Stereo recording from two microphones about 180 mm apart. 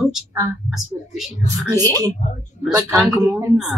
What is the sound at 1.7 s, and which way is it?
Speech, 15° left (ahead or behind).